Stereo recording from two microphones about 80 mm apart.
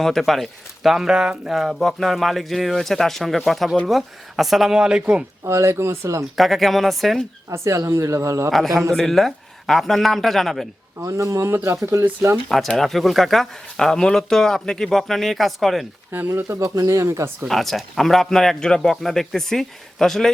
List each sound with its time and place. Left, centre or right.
0.0 s speech: centre
5.5 s speech: right
6.3 s speech: centre
7.5 s speech: right
8.4 s speech: centre
11.0 s speech: right
12.5 s speech: centre
16.3 s speech: right
17.5 s speech: centre